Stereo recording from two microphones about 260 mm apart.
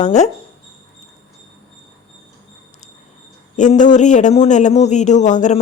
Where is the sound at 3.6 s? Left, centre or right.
Left.